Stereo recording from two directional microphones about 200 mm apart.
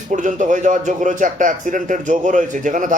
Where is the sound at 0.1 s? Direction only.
40° right (ahead or behind).